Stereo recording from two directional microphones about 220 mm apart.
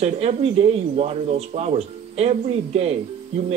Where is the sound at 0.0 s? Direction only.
30° right (ahead or behind).